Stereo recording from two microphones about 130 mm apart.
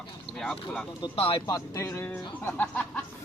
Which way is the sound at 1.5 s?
25° left (ahead or behind).